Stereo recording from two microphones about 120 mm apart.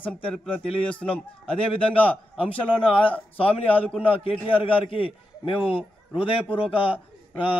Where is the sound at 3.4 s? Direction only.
50° left (ahead or behind).